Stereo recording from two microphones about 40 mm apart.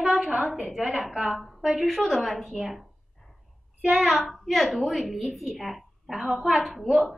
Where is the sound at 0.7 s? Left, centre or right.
Centre.